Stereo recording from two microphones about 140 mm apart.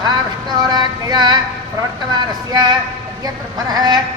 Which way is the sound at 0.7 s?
30° right (ahead or behind).